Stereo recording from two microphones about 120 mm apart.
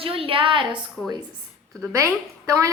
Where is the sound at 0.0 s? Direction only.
50° right (ahead or behind).